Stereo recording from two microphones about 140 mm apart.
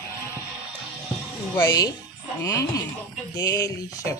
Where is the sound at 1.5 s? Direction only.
25° left (ahead or behind).